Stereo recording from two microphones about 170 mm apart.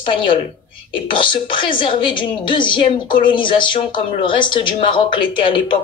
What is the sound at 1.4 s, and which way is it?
Speech, 30° left (ahead or behind).